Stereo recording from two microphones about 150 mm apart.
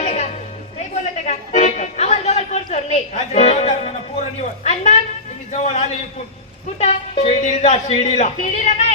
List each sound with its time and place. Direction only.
0.0 s music: 50° left (ahead or behind)
4.4 s speech: 45° left (ahead or behind)